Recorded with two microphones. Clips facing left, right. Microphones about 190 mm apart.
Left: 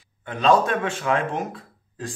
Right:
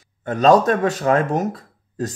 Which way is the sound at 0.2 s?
45° right (ahead or behind).